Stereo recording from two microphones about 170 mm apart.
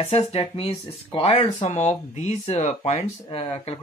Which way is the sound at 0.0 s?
35° left (ahead or behind).